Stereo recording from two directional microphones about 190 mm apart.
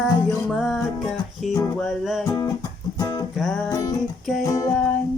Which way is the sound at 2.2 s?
20° left (ahead or behind).